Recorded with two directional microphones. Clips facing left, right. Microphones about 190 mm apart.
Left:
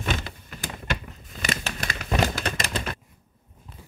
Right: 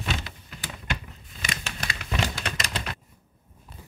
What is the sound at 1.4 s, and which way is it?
Typewriter, 40° left (ahead or behind).